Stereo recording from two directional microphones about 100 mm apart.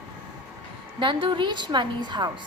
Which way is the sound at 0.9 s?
55° right (ahead or behind).